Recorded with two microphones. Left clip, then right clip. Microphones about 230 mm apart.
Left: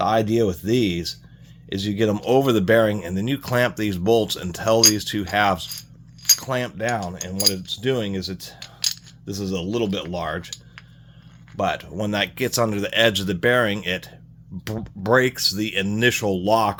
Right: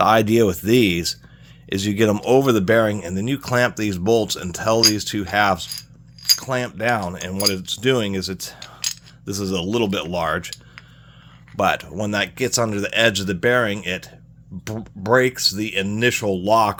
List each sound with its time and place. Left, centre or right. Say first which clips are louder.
0.0 s speech: right 4 dB; right
11.5 s speech: right 4 dB; right
11.9 s speech: right 1 dB; centre